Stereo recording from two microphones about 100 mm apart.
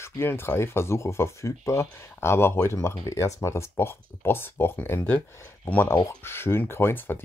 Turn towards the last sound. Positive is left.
turn(degrees=20)  # may be behind; listen again after turning